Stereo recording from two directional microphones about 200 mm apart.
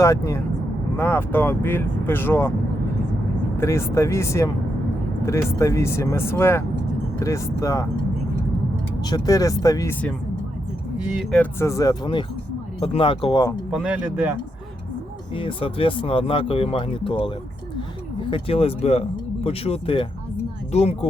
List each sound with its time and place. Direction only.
0.0 s speech: 15° left (ahead or behind)
3.6 s speech: 15° left (ahead or behind)
9.0 s speech: 20° left (ahead or behind)
10.9 s speech: 5° right (ahead or behind)
11.6 s speech: 15° left (ahead or behind)
13.5 s speech: centre (ahead or behind)
15.4 s speech: 25° left (ahead or behind)